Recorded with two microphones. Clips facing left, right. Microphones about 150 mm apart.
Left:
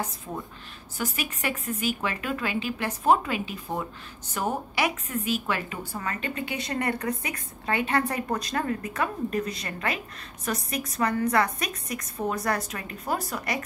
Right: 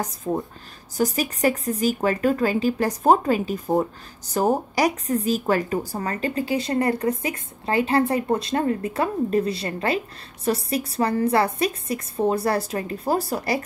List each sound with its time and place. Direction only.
0.3 s speech: 50° right (ahead or behind)
0.9 s a woman's voice: 40° right (ahead or behind)